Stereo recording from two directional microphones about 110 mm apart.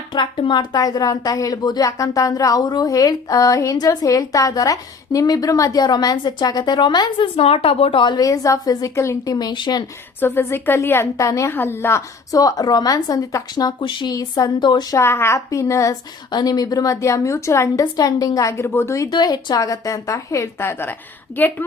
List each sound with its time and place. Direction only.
0.1 s a woman's voice: 50° left (ahead or behind)
7.3 s a woman's voice: 60° left (ahead or behind); by 9.8 s 45° left (ahead or behind)
10.2 s a woman's voice: 20° left (ahead or behind); by 14.9 s 40° left (ahead or behind)
14.9 s a woman's voice: 25° left (ahead or behind)
19.1 s a woman's voice: 40° left (ahead or behind); by 20.9 s 20° left (ahead or behind)